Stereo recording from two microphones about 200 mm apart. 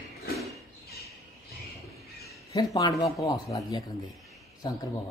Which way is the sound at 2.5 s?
15° left (ahead or behind).